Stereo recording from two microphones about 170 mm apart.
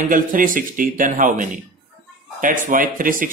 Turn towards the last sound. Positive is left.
turn(degrees=-55)  # may be behind; listen again after turning